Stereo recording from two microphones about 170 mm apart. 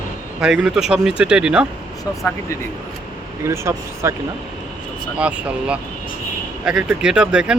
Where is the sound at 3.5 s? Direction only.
15° right (ahead or behind).